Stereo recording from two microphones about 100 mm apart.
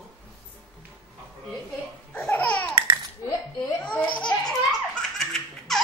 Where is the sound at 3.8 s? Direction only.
15° left (ahead or behind).